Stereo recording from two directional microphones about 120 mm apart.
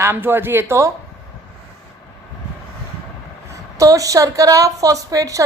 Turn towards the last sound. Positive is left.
turn(degrees=-30)  # may be behind; listen again after turning